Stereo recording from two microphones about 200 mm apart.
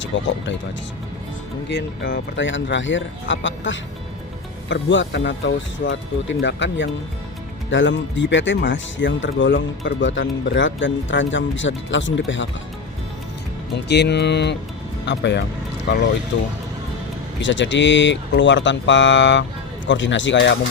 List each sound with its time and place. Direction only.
0.0 s speech: 65° left (ahead or behind)
1.7 s speech: 55° left (ahead or behind)
13.8 s speech: 55° left (ahead or behind)